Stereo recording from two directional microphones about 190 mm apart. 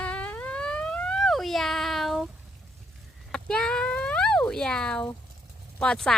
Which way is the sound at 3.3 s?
5° left (ahead or behind).